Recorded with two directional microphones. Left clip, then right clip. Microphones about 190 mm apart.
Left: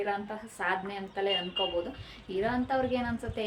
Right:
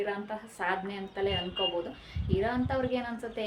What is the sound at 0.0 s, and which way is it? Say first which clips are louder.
A woman's voice: left 1 dB; centre (ahead or behind).